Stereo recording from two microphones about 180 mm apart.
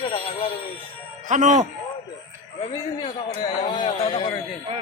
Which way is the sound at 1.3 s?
40° right (ahead or behind).